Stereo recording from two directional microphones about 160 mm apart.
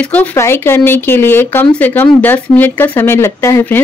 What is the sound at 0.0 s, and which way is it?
A woman's voice, 10° left (ahead or behind).